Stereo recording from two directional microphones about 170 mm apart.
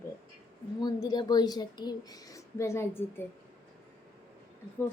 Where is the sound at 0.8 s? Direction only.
25° left (ahead or behind).